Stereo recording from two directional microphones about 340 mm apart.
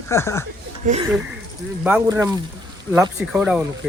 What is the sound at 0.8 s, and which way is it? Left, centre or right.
Speech, right.